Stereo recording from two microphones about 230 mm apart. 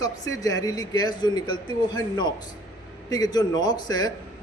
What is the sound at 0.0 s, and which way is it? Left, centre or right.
A man's voice, centre.